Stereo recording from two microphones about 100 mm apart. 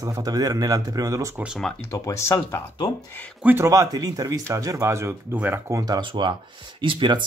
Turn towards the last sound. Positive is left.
turn(degrees=-55)  # may be behind; listen again after turning